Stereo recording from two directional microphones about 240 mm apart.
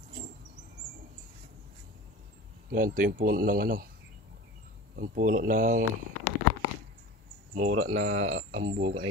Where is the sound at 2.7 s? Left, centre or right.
Right.